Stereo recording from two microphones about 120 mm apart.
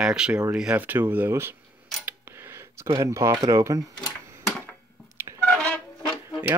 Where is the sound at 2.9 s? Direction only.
25° right (ahead or behind).